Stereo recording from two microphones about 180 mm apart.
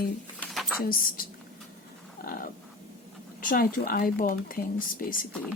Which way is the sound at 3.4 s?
50° left (ahead or behind).